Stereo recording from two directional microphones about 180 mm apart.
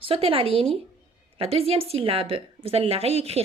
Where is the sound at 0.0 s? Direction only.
30° right (ahead or behind).